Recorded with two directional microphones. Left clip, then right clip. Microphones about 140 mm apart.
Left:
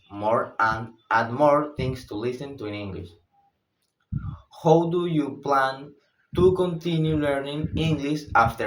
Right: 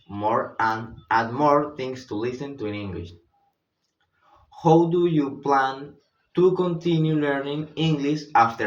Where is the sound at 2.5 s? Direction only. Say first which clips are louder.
Right 2 dB; 35° left (ahead or behind).